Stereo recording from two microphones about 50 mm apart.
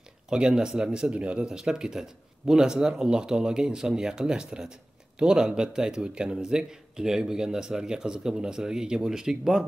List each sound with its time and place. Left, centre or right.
0.3 s speech: centre
1.4 s speech: centre